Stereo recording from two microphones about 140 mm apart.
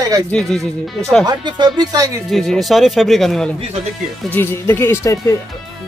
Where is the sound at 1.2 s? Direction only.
30° right (ahead or behind).